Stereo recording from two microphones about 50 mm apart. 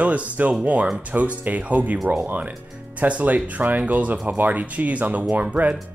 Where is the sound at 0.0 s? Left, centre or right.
Right.